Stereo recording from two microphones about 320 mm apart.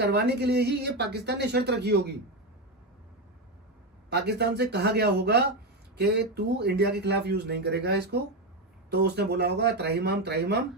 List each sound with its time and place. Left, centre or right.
0.0 s speech: right
4.1 s speech: right